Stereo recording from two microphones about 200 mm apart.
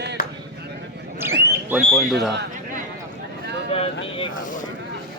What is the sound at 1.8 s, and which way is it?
Speech, centre (ahead or behind).